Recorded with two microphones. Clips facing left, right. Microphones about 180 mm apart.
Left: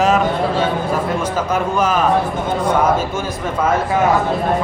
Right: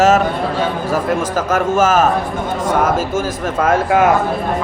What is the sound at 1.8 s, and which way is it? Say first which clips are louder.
Speech: right 4 dB; 45° right (ahead or behind).